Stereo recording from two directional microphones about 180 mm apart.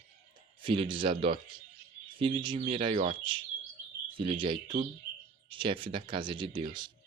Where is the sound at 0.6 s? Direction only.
30° right (ahead or behind).